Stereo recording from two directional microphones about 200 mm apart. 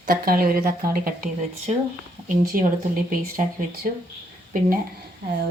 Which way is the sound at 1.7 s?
35° right (ahead or behind).